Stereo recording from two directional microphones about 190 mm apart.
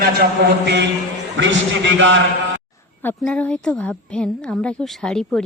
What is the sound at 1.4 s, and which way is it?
Speech, 75° right (ahead or behind).